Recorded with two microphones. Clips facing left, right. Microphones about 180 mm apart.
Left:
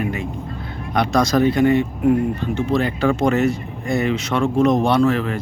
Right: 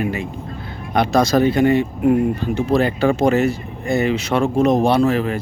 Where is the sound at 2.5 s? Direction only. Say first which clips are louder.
Right 3 dB; 35° right (ahead or behind).